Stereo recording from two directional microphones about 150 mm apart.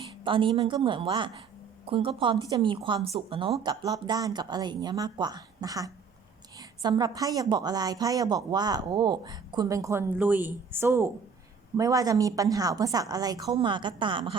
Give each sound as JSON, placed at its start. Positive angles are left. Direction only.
{"t": 0.3, "sound": "a woman's voice", "side_deg": -35}
{"t": 2.5, "sound": "a woman's voice", "side_deg": -25}
{"t": 2.7, "sound": "a woman's voice", "side_deg": -35}